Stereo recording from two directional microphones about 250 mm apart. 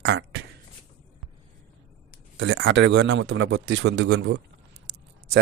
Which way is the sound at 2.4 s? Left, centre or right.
Right.